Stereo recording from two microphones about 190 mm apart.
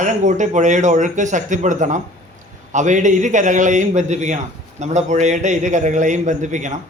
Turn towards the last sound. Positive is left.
turn(degrees=-40)  # may be behind; listen again after turning